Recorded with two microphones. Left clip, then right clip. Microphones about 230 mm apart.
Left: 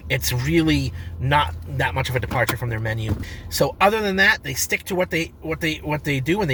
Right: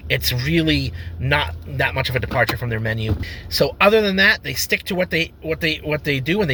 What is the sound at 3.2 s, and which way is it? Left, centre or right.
Speech, left.